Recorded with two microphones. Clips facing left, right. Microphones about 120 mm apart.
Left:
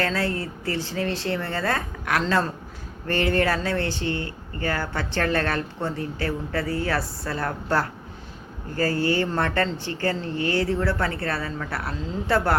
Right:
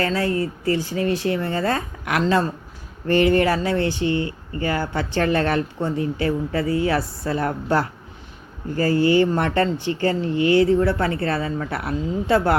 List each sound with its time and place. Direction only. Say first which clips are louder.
0.1 s speech: right 5 dB; 15° right (ahead or behind)
9.0 s speech: right 8 dB; 15° right (ahead or behind)